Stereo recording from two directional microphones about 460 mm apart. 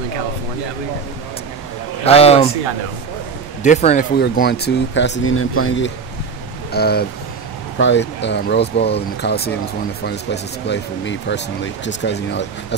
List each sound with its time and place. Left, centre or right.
2.0 s a man's voice: centre
3.6 s speech: centre